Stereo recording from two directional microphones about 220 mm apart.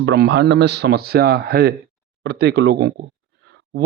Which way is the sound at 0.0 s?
50° right (ahead or behind).